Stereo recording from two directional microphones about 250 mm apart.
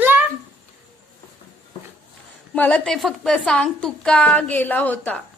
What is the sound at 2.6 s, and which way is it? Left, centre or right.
A woman's voice, centre.